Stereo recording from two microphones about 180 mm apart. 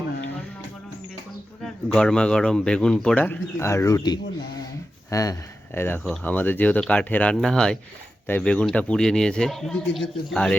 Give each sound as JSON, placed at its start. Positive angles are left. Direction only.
{"t": 1.6, "sound": "speech", "side_deg": 5}